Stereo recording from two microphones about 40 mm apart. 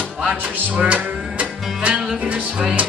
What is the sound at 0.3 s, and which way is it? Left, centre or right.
Music, right.